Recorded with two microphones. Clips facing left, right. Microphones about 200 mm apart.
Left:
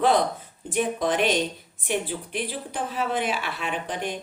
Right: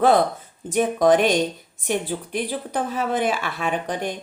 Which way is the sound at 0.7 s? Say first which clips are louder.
Right 7 dB; 45° right (ahead or behind).